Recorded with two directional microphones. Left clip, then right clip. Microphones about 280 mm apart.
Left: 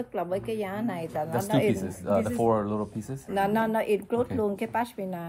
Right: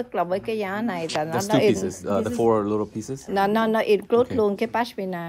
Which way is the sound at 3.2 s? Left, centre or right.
Right.